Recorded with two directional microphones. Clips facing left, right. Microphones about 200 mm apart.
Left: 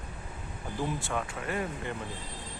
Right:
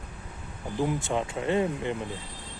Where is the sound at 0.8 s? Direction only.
20° right (ahead or behind).